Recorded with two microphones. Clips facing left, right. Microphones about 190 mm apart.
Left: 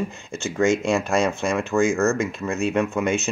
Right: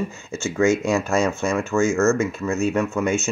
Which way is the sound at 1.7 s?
15° left (ahead or behind).